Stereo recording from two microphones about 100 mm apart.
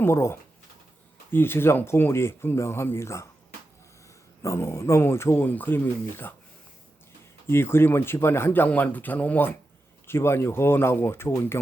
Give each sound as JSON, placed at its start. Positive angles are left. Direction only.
{"t": 0.0, "sound": "speech", "side_deg": 25}
{"t": 4.4, "sound": "speech", "side_deg": 30}
{"t": 7.4, "sound": "speech", "side_deg": 25}